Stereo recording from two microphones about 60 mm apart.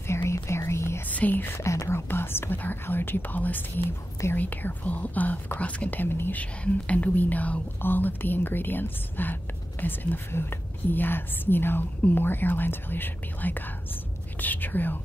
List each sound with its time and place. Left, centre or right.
0.0 s whispering: left
1.0 s whispering: left
1.6 s speech: left
5.9 s speech: left
6.3 s speech: left